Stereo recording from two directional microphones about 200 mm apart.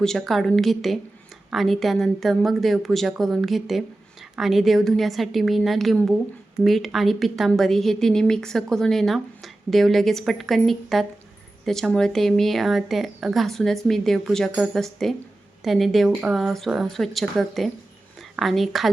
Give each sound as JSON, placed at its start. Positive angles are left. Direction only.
{"t": 0.0, "sound": "a woman's voice", "side_deg": 0}